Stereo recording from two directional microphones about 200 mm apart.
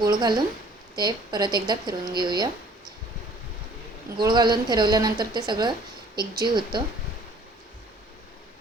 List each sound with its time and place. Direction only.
0.0 s a woman's voice: 20° right (ahead or behind)
4.2 s a woman's voice: 20° right (ahead or behind)